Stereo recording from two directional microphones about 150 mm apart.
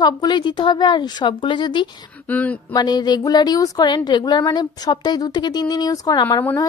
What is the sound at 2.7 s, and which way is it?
A woman's voice, 25° left (ahead or behind).